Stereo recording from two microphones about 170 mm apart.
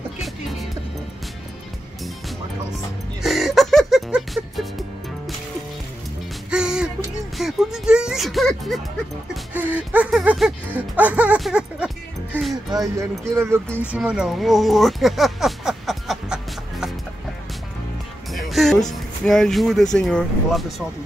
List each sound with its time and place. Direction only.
0.2 s music: centre (ahead or behind)
3.2 s music: centre (ahead or behind)
6.5 s music: 5° right (ahead or behind)
12.7 s speech: 20° right (ahead or behind); by 16.3 s centre (ahead or behind)
18.3 s music: centre (ahead or behind)